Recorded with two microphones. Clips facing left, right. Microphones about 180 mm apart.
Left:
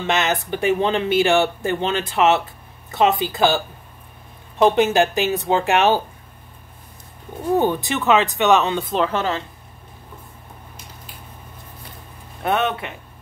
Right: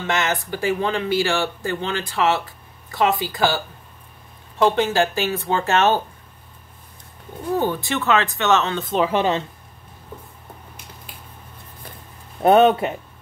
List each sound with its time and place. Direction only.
0.0 s speech: 20° left (ahead or behind)
7.5 s speech: 15° left (ahead or behind)
9.1 s speech: 20° right (ahead or behind)
12.4 s speech: 35° right (ahead or behind)